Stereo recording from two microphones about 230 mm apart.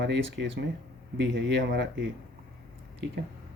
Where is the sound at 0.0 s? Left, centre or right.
Right.